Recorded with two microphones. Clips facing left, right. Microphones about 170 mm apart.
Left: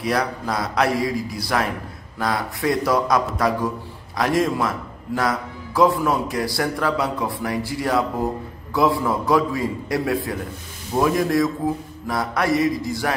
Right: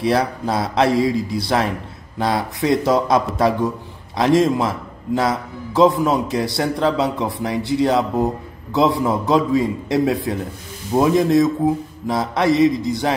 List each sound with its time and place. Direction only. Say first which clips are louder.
0.0 s a man's voice: right 4 dB; 30° right (ahead or behind)